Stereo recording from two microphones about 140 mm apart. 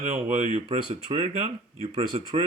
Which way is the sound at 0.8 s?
40° right (ahead or behind).